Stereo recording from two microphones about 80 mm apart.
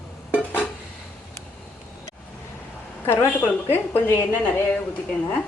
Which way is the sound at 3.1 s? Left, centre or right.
Left.